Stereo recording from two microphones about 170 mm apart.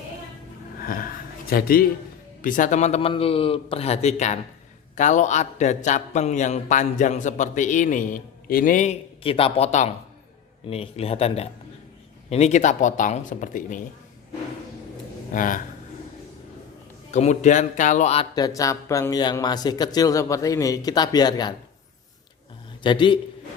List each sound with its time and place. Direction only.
0.8 s a sound: 55° left (ahead or behind)
2.4 s a man's voice: 50° left (ahead or behind)
15.3 s a man's voice: 50° left (ahead or behind)
17.1 s a man's voice: 45° left (ahead or behind)
18.3 s speech: 20° left (ahead or behind)
22.8 s speech: 30° left (ahead or behind)